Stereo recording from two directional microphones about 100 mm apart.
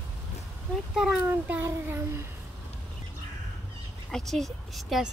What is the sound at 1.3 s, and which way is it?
Speech, 20° right (ahead or behind).